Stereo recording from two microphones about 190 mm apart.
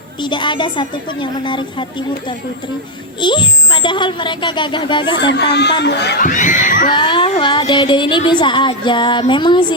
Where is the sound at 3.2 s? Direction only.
25° left (ahead or behind).